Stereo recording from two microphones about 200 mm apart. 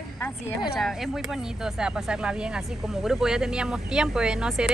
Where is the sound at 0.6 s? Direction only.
Centre (ahead or behind).